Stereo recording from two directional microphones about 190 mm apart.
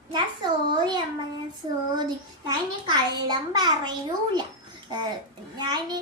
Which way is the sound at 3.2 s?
25° right (ahead or behind).